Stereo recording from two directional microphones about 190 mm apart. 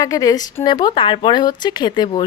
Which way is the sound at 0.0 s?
20° left (ahead or behind).